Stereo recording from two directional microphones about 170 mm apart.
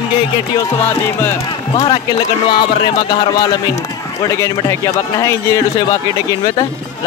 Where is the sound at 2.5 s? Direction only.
25° left (ahead or behind).